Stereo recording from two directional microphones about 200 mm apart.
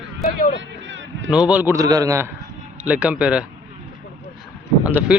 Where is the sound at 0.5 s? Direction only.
65° right (ahead or behind).